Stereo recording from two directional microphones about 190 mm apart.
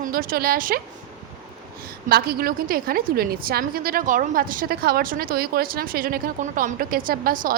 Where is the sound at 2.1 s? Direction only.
55° right (ahead or behind).